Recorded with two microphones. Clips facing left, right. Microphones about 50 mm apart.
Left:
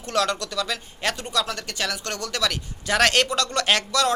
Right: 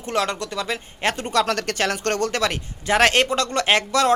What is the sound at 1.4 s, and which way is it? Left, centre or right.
Speech, right.